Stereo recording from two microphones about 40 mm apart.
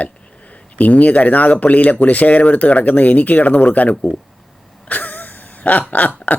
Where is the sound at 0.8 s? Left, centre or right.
Left.